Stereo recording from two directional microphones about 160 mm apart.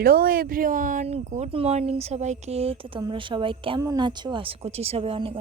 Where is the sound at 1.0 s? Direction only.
45° right (ahead or behind).